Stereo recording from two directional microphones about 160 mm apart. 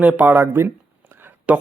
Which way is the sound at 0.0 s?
10° right (ahead or behind).